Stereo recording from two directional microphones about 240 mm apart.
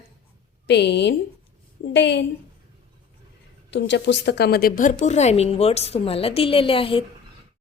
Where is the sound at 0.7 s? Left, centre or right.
Left.